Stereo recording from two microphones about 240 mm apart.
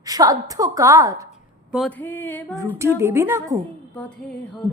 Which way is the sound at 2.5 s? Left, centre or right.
Centre.